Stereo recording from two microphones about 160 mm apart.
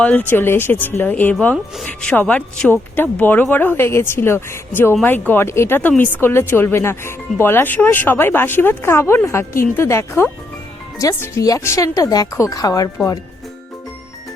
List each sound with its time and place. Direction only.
0.0 s speech: 10° left (ahead or behind)